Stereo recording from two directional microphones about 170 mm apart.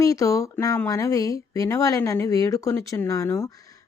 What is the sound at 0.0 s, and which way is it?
Speech, 20° left (ahead or behind).